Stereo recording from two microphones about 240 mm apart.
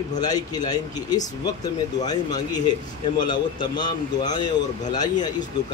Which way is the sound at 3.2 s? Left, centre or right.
Centre.